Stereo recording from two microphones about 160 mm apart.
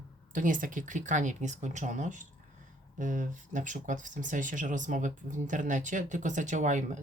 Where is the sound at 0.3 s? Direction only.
55° right (ahead or behind).